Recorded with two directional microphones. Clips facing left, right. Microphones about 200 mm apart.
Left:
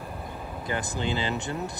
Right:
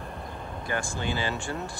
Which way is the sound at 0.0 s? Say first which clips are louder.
Left 1 dB; 5° left (ahead or behind).